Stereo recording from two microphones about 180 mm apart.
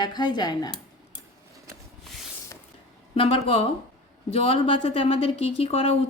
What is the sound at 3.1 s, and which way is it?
A woman's voice, 30° left (ahead or behind).